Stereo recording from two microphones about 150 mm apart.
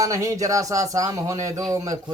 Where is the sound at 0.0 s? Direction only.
20° right (ahead or behind).